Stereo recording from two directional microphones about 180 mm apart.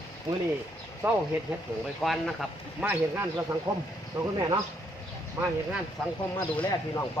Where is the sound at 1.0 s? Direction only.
15° right (ahead or behind).